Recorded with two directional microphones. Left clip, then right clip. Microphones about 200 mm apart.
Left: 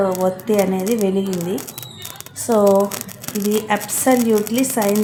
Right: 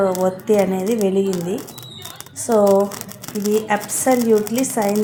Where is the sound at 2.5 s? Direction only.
5° right (ahead or behind).